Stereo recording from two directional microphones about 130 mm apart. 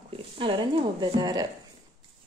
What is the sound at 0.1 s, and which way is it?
Speech, 45° right (ahead or behind).